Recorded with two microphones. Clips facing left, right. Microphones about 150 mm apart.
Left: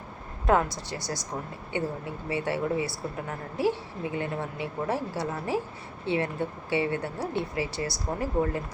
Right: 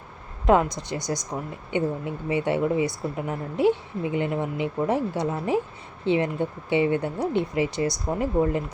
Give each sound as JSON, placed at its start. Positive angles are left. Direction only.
{"t": 0.4, "sound": "a woman's voice", "side_deg": -20}